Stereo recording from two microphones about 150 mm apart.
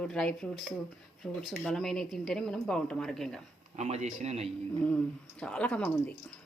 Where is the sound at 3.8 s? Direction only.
50° right (ahead or behind).